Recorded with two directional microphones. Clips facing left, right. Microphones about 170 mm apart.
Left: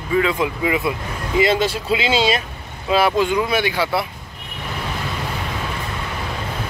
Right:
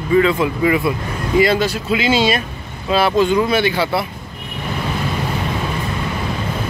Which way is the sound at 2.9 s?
15° left (ahead or behind).